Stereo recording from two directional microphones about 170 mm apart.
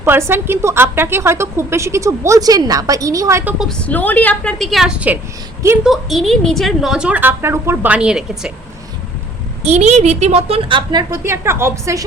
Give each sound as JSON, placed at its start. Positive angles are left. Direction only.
{"t": 0.0, "sound": "a woman's voice", "side_deg": -15}
{"t": 3.6, "sound": "a woman's voice", "side_deg": 5}
{"t": 9.6, "sound": "a woman's voice", "side_deg": -40}
{"t": 11.1, "sound": "a woman's voice", "side_deg": -15}